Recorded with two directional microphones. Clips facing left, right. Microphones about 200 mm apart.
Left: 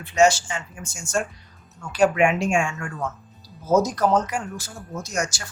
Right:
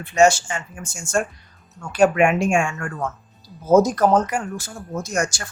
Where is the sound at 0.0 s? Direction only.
50° right (ahead or behind).